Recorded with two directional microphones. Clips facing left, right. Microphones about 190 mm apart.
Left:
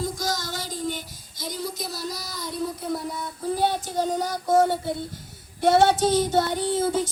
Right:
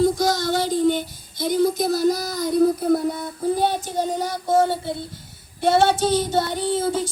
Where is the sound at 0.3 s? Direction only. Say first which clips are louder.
Right 11 dB; 45° left (ahead or behind).